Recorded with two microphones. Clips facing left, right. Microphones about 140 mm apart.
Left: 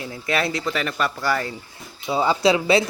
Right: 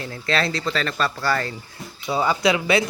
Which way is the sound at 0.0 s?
15° left (ahead or behind).